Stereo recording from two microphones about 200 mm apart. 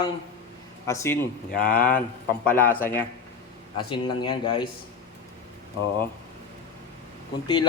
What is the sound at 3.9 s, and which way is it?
Speech, 25° left (ahead or behind).